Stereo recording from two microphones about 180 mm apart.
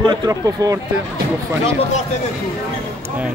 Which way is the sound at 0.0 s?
25° right (ahead or behind).